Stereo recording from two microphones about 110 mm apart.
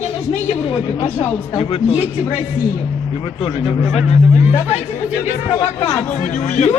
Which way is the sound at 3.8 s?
85° left.